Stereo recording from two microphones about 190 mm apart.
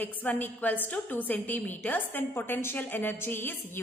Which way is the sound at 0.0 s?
10° left (ahead or behind).